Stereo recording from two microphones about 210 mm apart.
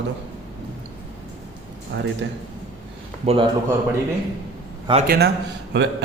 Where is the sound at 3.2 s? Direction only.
30° right (ahead or behind).